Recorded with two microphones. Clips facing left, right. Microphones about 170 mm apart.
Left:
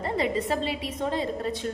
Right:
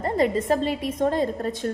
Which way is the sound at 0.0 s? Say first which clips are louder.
Right 4 dB; 45° right (ahead or behind).